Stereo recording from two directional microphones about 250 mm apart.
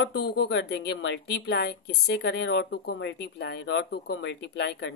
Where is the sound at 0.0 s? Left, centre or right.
Left.